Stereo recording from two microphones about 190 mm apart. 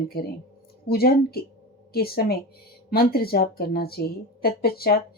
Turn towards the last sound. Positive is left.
turn(degrees=55)  # may be behind; listen again after turning